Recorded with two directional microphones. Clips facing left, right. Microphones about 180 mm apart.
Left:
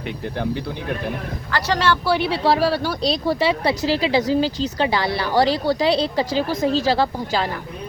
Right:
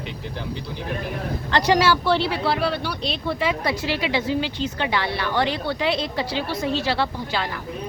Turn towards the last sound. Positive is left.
turn(degrees=40)  # may be behind; listen again after turning